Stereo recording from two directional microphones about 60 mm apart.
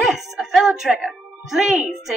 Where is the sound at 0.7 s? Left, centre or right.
Centre.